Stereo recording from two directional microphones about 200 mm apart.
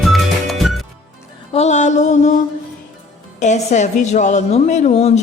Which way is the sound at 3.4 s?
35° left (ahead or behind).